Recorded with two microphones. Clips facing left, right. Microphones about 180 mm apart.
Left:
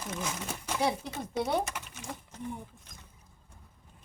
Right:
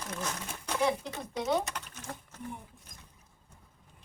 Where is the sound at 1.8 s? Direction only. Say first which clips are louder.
Left 1 dB; 10° left (ahead or behind).